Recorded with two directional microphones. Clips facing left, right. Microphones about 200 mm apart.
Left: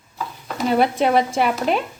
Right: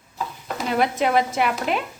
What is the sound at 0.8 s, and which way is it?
A woman's voice, 30° left (ahead or behind).